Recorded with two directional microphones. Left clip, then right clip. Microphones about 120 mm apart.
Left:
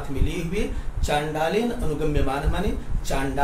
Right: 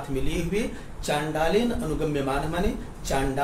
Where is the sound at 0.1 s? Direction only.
45° right (ahead or behind).